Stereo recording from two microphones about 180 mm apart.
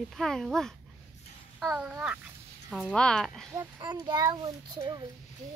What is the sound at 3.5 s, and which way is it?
A child's voice, 25° right (ahead or behind).